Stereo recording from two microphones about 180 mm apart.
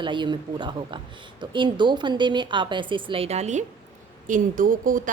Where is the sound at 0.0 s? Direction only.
25° right (ahead or behind).